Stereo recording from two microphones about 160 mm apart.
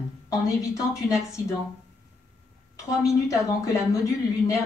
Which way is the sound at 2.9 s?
20° left (ahead or behind).